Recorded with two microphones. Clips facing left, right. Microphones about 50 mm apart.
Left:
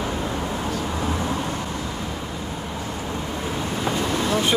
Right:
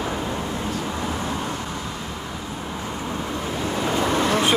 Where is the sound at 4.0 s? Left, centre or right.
Right.